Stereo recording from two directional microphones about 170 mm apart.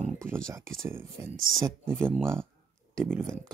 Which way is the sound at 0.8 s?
15° right (ahead or behind).